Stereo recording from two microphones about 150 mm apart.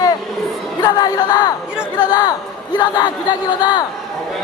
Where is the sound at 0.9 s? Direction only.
25° left (ahead or behind).